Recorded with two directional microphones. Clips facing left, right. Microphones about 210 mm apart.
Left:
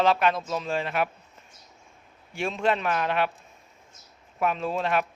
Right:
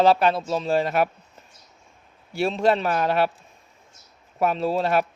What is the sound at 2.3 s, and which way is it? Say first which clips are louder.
Speech: right 5 dB; 35° right (ahead or behind).